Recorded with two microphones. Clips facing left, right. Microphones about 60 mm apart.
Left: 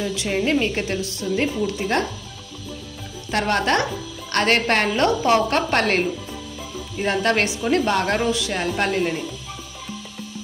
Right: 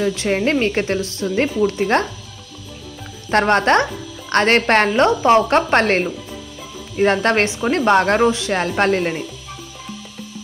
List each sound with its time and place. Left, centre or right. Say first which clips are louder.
0.0 s speech: right 4 dB; right
3.3 s speech: right 6 dB; right